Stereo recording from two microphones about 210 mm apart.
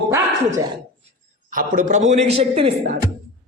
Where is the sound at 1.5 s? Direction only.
40° right (ahead or behind).